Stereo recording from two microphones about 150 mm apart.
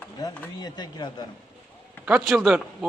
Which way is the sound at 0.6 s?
30° left (ahead or behind).